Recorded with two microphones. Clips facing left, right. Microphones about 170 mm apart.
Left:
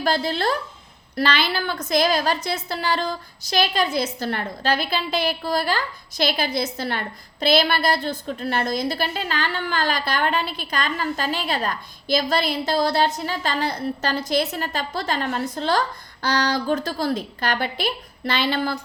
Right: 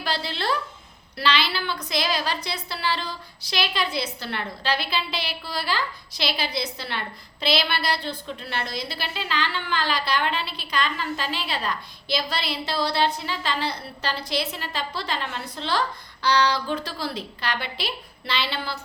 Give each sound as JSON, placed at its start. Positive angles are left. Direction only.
{"t": 0.0, "sound": "a woman's voice", "side_deg": 45}